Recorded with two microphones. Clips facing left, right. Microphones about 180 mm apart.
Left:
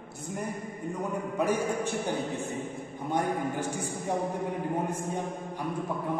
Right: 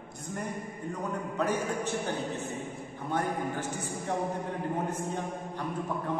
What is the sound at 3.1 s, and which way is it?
A man's voice, 10° left (ahead or behind).